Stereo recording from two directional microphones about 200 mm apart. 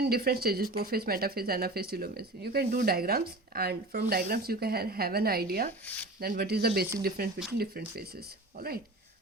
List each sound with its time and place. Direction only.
0.0 s speech: 50° right (ahead or behind)